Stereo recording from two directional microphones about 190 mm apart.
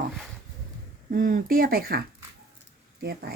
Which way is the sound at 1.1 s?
45° right (ahead or behind).